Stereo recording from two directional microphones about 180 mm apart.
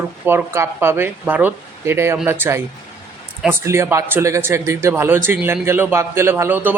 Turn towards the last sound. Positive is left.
turn(degrees=-10)  # may be behind; listen again after turning